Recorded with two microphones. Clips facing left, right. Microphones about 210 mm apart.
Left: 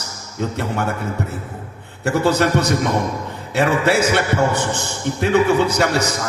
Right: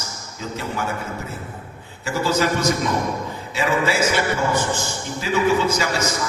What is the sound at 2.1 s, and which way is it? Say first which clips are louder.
A man's voice: left 4 dB; 65° left (ahead or behind).